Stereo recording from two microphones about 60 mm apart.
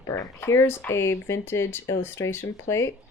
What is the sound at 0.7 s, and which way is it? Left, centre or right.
Speech, left.